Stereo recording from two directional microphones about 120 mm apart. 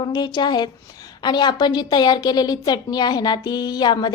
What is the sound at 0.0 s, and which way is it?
A woman's voice, 35° left (ahead or behind).